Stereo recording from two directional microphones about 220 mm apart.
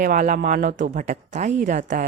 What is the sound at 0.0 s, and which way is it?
Speech, 35° right (ahead or behind).